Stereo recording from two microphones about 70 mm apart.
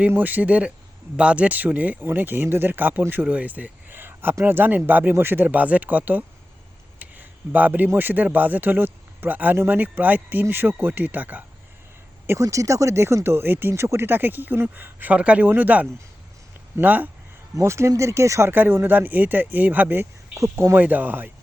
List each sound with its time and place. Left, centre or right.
0.2 s speech: right
7.0 s a sound: right
7.9 s speech: right
12.4 s speech: right
17.5 s speech: right
20.3 s speech: right
20.7 s speech: right